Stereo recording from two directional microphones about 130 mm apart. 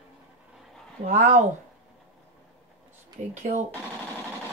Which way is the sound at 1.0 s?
65° right (ahead or behind).